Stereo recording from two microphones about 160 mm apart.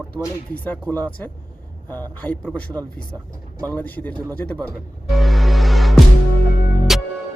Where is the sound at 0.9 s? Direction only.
25° right (ahead or behind).